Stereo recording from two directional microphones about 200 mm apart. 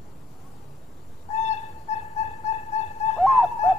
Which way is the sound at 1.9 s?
35° left (ahead or behind).